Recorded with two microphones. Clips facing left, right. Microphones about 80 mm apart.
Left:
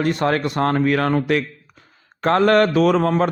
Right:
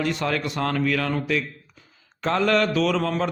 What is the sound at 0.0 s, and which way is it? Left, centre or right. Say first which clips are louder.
A man's voice: left 6 dB; left.